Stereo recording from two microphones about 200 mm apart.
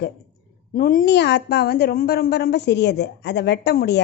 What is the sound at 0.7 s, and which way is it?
A woman's voice, 45° left (ahead or behind).